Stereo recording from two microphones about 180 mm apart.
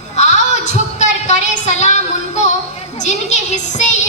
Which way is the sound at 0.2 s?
40° left (ahead or behind).